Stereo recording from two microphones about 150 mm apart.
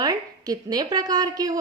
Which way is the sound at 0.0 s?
25° right (ahead or behind).